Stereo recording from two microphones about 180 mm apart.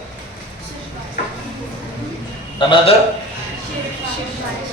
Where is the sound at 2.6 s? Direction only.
25° left (ahead or behind).